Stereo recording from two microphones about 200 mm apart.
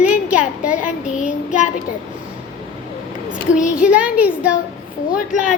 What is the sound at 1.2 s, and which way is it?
Child singing, 40° left (ahead or behind).